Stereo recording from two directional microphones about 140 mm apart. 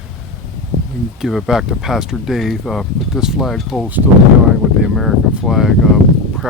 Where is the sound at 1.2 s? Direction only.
Centre (ahead or behind).